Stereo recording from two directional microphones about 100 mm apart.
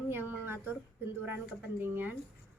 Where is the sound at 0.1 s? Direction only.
20° right (ahead or behind).